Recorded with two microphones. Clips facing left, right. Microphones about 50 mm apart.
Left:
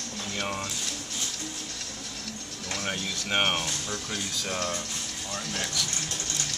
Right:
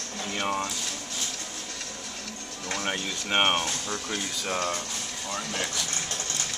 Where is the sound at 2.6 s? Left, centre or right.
Right.